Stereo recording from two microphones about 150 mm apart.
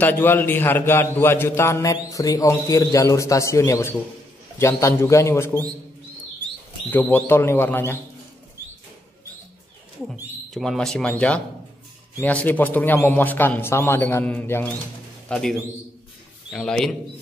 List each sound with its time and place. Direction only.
0.0 s a man's voice: 15° left (ahead or behind)
6.9 s a man's voice: 10° left (ahead or behind)
10.5 s a man's voice: centre (ahead or behind)
16.5 s speech: 5° left (ahead or behind)